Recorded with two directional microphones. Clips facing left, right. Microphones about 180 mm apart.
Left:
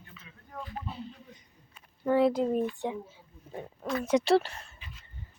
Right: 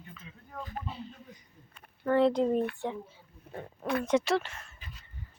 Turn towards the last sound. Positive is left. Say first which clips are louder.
# left 5 dB
turn(degrees=35)  # may be behind; listen again after turning